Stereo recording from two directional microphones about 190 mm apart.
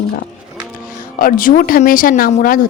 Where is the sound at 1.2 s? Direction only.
45° left (ahead or behind).